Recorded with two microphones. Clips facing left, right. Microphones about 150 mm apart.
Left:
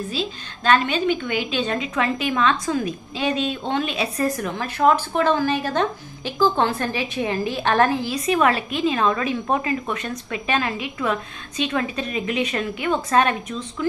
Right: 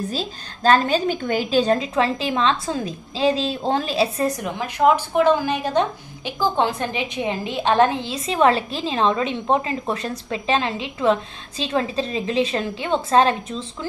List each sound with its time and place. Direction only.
0.1 s a woman's voice: 40° right (ahead or behind)
4.4 s speech: 15° right (ahead or behind)